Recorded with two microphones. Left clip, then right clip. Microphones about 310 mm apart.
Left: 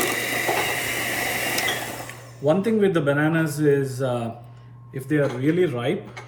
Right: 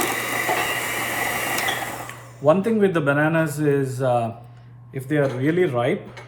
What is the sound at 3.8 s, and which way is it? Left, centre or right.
Speech, right.